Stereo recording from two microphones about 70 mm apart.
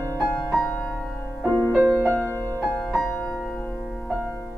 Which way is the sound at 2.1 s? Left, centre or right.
Left.